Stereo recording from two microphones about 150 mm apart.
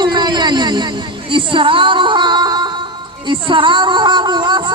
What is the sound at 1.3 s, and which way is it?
Music, 35° right (ahead or behind).